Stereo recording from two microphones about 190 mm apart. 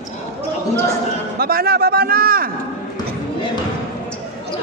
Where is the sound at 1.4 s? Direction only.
55° right (ahead or behind).